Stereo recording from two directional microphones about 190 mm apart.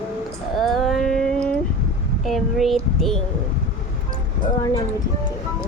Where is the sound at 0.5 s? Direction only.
Centre (ahead or behind).